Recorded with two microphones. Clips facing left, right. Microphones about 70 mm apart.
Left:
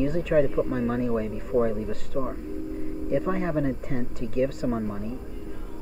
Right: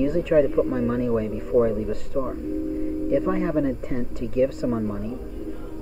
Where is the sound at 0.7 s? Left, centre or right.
Right.